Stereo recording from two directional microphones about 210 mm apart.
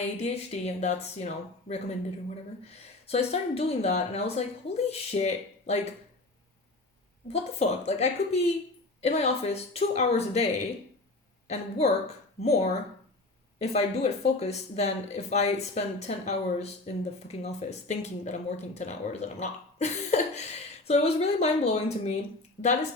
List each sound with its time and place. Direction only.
0.0 s speech: 30° left (ahead or behind)
7.6 s speech: 30° left (ahead or behind)